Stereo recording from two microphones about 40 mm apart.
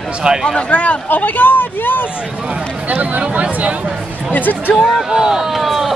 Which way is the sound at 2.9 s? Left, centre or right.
Right.